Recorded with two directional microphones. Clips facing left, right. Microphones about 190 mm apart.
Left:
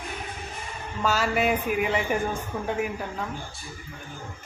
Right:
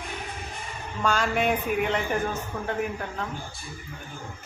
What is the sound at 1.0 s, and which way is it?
A man's voice, 5° left (ahead or behind).